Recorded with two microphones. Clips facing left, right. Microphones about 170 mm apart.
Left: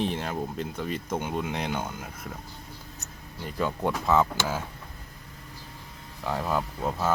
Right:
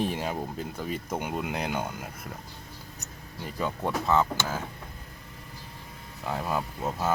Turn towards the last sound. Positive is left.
turn(degrees=-5)  # may be behind; listen again after turning